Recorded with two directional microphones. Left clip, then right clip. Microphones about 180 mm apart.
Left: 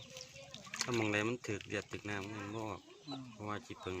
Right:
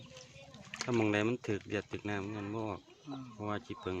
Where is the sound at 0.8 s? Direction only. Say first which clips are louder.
Right 3 dB; 50° right (ahead or behind).